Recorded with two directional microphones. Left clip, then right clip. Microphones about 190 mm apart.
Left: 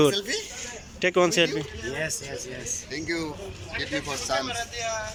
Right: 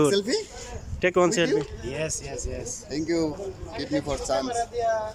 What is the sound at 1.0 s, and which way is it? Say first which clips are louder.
A man's voice: even; 5° right (ahead or behind).